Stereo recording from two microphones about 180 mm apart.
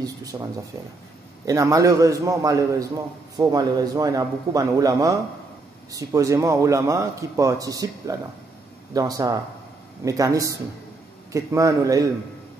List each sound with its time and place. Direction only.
0.0 s a man's voice: 20° right (ahead or behind)